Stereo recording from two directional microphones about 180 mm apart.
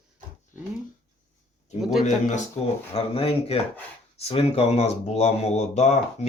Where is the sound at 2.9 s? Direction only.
30° left (ahead or behind).